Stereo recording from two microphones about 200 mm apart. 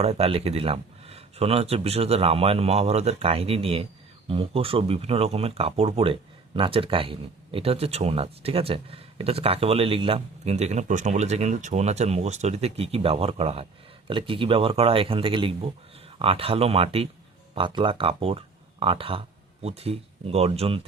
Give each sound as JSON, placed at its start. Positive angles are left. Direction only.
{"t": 0.0, "sound": "speech", "side_deg": -30}